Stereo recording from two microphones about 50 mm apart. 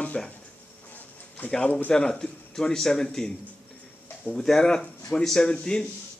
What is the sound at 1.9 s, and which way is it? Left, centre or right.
Speech, centre.